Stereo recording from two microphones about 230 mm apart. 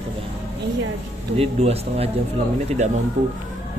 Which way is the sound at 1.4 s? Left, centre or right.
Right.